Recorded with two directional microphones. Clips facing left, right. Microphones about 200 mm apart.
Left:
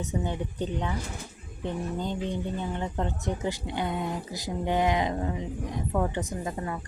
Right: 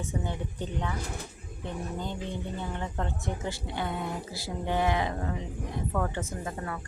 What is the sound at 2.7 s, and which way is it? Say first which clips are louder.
A woman's voice: left 3 dB; 20° left (ahead or behind).